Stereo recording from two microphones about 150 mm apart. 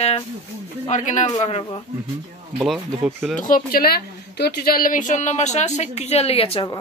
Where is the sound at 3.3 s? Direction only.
65° left (ahead or behind); by 6.7 s 40° left (ahead or behind).